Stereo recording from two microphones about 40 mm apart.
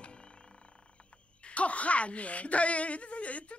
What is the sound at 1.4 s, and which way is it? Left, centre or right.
Speech, left.